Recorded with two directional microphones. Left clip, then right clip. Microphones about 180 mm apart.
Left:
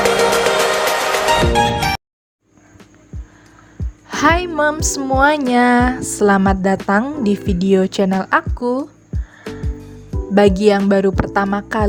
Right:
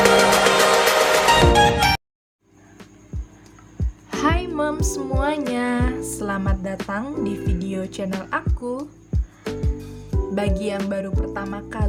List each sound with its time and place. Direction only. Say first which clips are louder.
0.0 s music: left 1 dB; centre (ahead or behind)
3.8 s music: right 1 dB; centre (ahead or behind)
4.1 s music: left 8 dB; 50° left (ahead or behind)
5.5 s speech: left 11 dB; 50° left (ahead or behind)
9.1 s music: right 1 dB; centre (ahead or behind)
10.3 s speech: left 13 dB; 45° left (ahead or behind)